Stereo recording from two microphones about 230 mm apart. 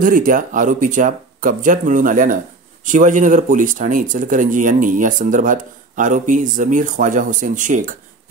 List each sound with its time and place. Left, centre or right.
0.0 s speech: right